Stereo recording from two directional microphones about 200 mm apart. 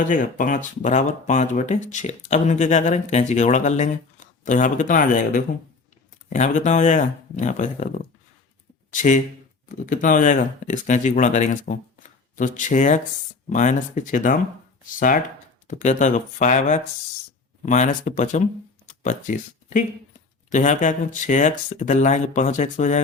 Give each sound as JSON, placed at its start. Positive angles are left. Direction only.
{"t": 0.0, "sound": "speech", "side_deg": 40}